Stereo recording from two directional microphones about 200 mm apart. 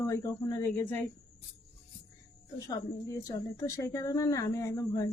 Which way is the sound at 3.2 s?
15° left (ahead or behind).